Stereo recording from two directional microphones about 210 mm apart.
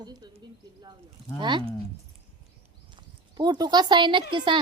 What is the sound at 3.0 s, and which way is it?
Speech, 20° right (ahead or behind).